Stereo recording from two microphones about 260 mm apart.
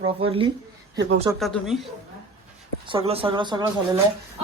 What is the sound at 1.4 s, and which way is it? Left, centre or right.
Speech, centre.